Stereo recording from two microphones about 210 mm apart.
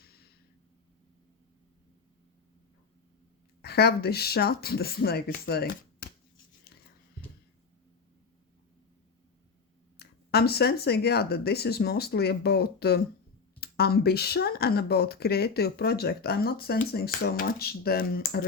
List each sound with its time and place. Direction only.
0.0 s a sound: 45° left (ahead or behind)
3.6 s speech: 50° left (ahead or behind)
10.0 s speech: 50° left (ahead or behind)